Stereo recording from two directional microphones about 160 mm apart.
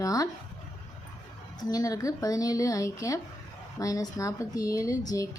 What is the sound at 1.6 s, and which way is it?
A woman's voice, 25° left (ahead or behind).